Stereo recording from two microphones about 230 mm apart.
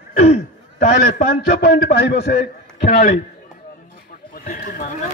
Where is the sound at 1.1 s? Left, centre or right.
Left.